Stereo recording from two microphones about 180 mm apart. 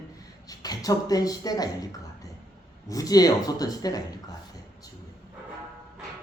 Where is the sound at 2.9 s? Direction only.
20° left (ahead or behind).